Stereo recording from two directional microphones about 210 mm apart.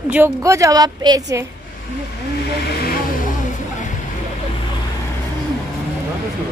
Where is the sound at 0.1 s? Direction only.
10° right (ahead or behind).